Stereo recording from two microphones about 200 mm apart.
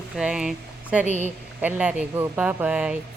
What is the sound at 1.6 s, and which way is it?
Speech, 5° right (ahead or behind).